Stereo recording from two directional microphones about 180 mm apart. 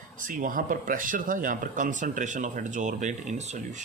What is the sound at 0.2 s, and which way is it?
Speech, 50° right (ahead or behind).